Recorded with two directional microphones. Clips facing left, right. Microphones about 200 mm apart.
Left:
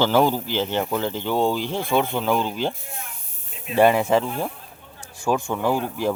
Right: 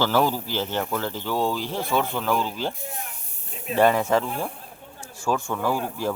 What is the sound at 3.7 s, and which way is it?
Speech, 10° left (ahead or behind).